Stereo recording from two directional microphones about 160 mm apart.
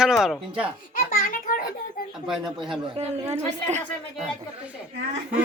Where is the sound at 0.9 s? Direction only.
60° left (ahead or behind).